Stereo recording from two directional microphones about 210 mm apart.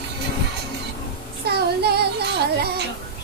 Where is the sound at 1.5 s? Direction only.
50° right (ahead or behind).